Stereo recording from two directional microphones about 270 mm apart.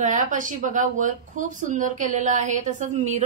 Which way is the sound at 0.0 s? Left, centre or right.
Right.